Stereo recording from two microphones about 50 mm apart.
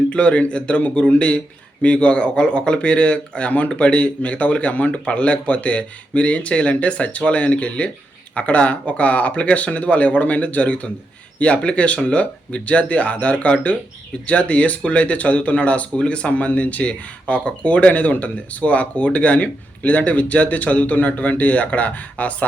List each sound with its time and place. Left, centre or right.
0.1 s speech: left